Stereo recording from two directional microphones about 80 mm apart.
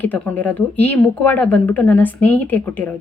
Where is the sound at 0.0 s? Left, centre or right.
Left.